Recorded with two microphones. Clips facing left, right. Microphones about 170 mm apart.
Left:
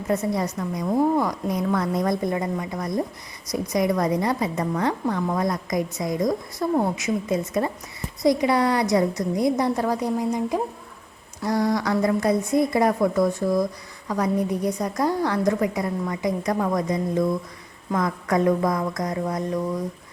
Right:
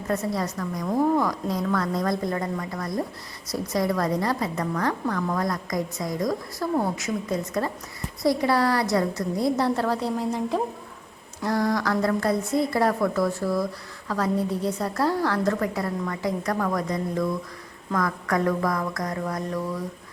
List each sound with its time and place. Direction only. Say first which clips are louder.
0.1 s a woman's voice: left 3 dB; 20° left (ahead or behind)
11.8 s a woman's voice: left 2 dB; 20° left (ahead or behind)